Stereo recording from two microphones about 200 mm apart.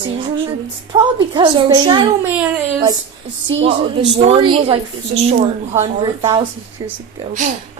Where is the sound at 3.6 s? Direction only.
30° right (ahead or behind).